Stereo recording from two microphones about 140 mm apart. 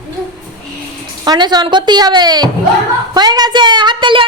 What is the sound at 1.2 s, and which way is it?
Speech, 30° right (ahead or behind).